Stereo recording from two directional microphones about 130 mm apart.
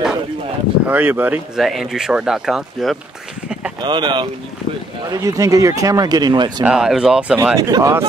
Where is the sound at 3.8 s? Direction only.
35° right (ahead or behind).